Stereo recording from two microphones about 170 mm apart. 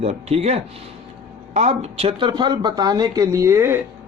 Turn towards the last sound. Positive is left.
turn(degrees=-15)  # may be behind; listen again after turning